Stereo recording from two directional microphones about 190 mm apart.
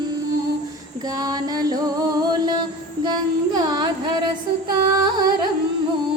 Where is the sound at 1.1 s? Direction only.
20° right (ahead or behind).